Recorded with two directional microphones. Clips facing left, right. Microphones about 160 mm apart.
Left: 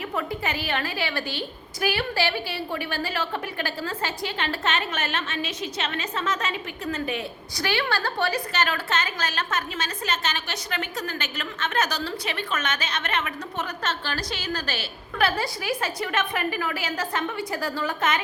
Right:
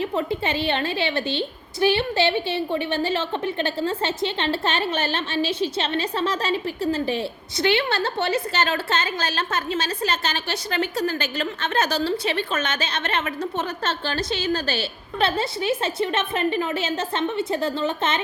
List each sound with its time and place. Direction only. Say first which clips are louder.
0.0 s a woman's voice: right 5 dB; 25° right (ahead or behind)